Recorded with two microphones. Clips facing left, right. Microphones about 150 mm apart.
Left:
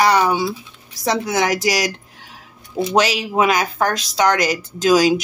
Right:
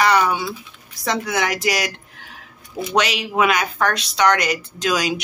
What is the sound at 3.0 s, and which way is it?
A woman's voice, 35° left (ahead or behind).